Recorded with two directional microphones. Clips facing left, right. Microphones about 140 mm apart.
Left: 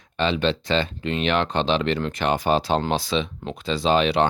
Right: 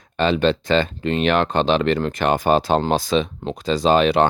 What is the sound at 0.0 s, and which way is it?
Speech, 45° right (ahead or behind).